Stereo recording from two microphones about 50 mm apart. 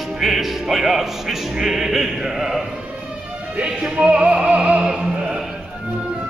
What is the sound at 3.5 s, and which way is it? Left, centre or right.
Music, centre.